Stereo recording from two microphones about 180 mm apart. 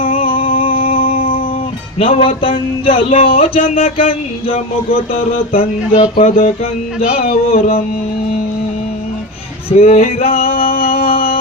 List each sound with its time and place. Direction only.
0.0 s music: 30° left (ahead or behind)
2.0 s speech: 30° left (ahead or behind)
9.6 s speech: 35° left (ahead or behind)
10.5 s music: 55° left (ahead or behind)